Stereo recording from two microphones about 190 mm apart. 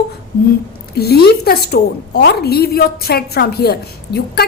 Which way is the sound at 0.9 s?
55° left (ahead or behind).